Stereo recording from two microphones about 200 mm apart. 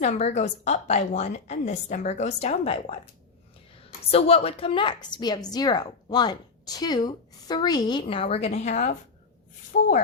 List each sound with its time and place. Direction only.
0.0 s a woman's voice: 35° left (ahead or behind)
4.0 s a woman's voice: 30° left (ahead or behind); by 9.9 s 45° left (ahead or behind)